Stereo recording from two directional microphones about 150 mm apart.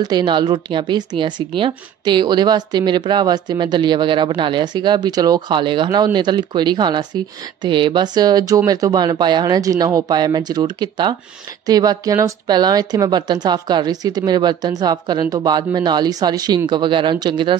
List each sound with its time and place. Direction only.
0.0 s speech: 30° right (ahead or behind)